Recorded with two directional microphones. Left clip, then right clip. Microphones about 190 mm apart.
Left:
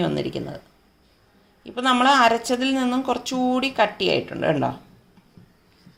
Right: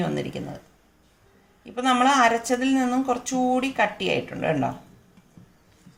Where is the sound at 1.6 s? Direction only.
35° left (ahead or behind).